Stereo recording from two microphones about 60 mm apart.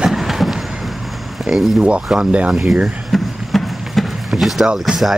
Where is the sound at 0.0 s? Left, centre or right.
Centre.